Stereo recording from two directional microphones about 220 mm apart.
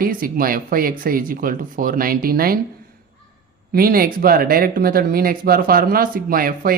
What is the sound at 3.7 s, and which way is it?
Speech, 40° right (ahead or behind).